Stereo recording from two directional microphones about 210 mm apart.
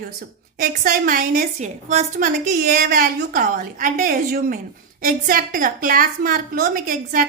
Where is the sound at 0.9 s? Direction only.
40° right (ahead or behind).